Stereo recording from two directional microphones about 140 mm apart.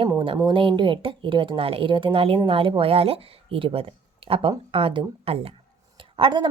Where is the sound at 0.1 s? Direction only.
30° right (ahead or behind).